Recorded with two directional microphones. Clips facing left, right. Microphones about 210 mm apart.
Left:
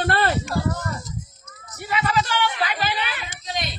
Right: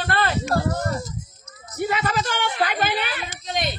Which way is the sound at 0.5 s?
60° right (ahead or behind).